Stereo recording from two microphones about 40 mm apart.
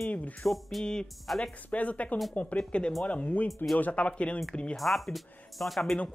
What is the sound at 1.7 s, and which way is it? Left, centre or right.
A woman's voice, left.